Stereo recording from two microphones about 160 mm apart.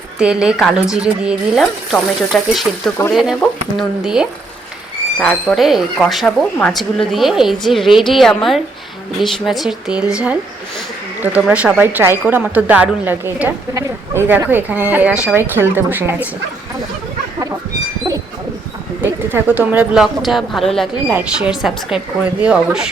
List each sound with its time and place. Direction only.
0.2 s speech: 5° right (ahead or behind)
3.0 s speech: 15° left (ahead or behind)
3.8 s a woman's voice: 5° right (ahead or behind)
19.0 s speech: 10° right (ahead or behind)
21.1 s speech: 10° right (ahead or behind)